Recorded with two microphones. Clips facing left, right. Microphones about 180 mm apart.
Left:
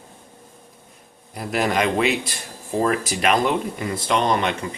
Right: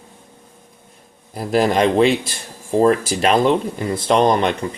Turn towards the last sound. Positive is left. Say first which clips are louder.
# right 5 dB
turn(degrees=-35)  # may be behind; listen again after turning